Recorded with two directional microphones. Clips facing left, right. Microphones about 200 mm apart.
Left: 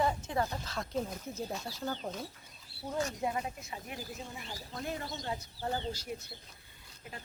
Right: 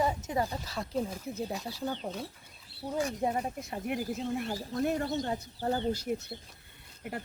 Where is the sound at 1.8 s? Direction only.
5° right (ahead or behind).